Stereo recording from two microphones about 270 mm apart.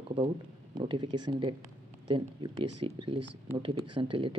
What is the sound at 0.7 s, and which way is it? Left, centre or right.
Speech, centre.